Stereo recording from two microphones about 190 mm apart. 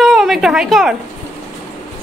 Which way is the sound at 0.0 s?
Centre (ahead or behind).